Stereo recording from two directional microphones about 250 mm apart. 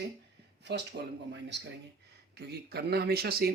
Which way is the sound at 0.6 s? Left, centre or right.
Right.